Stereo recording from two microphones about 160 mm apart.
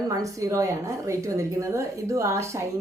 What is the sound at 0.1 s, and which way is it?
A woman's voice, 20° right (ahead or behind).